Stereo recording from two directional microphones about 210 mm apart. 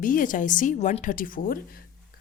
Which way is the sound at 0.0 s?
40° left (ahead or behind).